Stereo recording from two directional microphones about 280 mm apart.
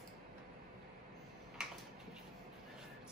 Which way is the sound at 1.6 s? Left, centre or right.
Centre.